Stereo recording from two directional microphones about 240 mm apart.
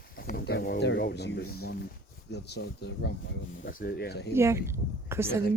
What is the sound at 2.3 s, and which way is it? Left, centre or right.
Speech, left.